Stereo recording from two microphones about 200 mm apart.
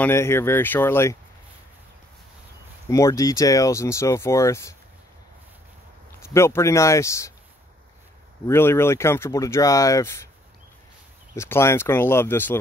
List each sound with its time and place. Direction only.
0.0 s speech: 10° left (ahead or behind)
2.9 s speech: 15° left (ahead or behind)
6.2 s speech: 15° left (ahead or behind)
8.5 s speech: 10° left (ahead or behind)
11.3 s speech: 15° left (ahead or behind)